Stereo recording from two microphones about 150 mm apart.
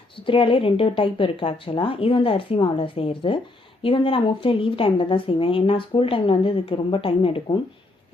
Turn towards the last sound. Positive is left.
turn(degrees=40)  # may be behind; listen again after turning